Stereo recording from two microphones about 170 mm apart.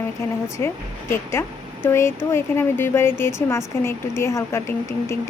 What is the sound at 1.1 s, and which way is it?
Speech, 15° left (ahead or behind).